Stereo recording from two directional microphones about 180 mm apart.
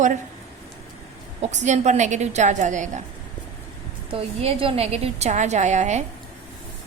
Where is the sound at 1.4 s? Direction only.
40° right (ahead or behind).